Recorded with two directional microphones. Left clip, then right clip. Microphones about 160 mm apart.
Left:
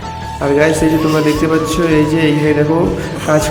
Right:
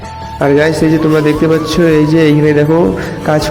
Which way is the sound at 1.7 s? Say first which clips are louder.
Right 3 dB; 20° right (ahead or behind).